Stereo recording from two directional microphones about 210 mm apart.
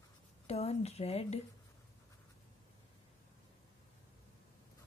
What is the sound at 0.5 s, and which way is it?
Speech, 30° left (ahead or behind).